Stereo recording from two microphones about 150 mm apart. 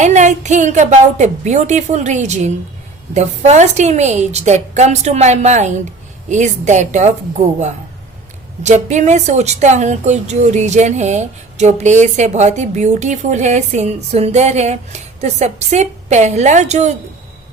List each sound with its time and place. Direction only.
0.0 s a woman's voice: 55° right (ahead or behind)